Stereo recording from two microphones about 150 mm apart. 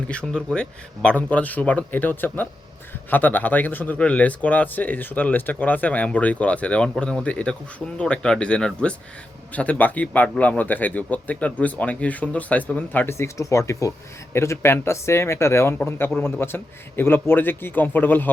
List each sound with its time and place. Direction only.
0.1 s speech: 5° left (ahead or behind)